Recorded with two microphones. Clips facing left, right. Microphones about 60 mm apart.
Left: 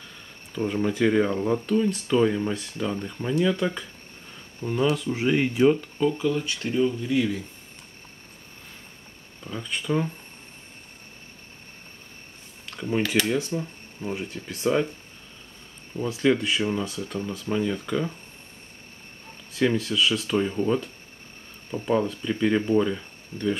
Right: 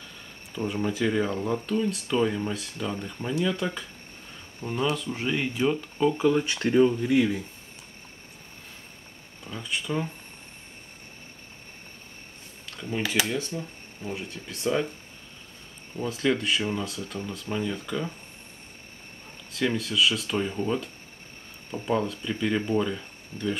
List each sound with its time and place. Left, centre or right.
0.6 s speech: centre
4.9 s speech: centre
5.8 s speech: centre
6.4 s speech: right
7.1 s speech: centre
9.5 s speech: centre
13.0 s speech: centre
13.5 s speech: centre
14.1 s speech: centre
16.0 s speech: centre
19.5 s speech: centre